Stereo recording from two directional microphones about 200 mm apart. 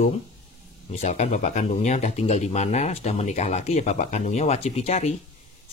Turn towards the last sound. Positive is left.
turn(degrees=35)  # may be behind; listen again after turning